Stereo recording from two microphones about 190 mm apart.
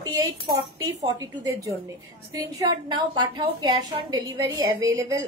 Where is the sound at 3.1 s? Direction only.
25° right (ahead or behind).